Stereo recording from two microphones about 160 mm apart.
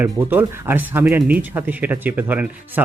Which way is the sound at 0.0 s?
10° right (ahead or behind).